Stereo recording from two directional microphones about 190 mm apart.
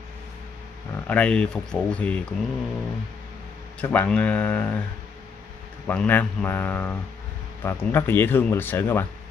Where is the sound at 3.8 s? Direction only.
5° left (ahead or behind).